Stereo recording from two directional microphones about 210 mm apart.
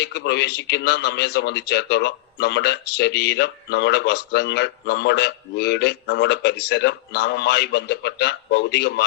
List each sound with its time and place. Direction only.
0.0 s a man's voice: 55° left (ahead or behind)